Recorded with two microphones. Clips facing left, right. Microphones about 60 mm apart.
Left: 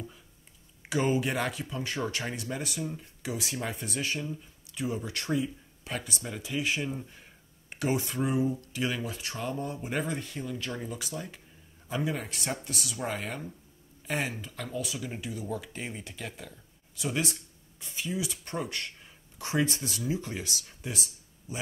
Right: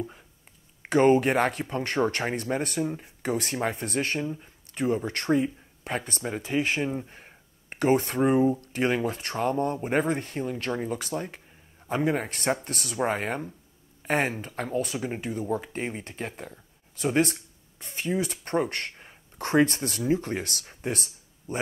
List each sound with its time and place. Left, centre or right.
0.8 s speech: right
4.2 s speech: right